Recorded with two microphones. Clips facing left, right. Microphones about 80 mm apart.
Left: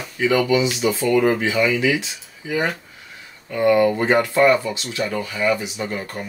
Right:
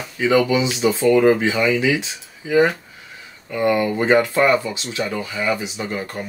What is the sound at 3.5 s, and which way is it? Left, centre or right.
Speech, centre.